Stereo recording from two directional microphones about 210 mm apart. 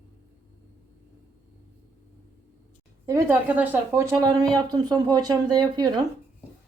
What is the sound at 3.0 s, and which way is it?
Speech, 15° right (ahead or behind).